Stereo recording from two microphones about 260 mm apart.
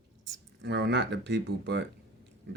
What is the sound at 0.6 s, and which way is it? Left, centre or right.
Speech, right.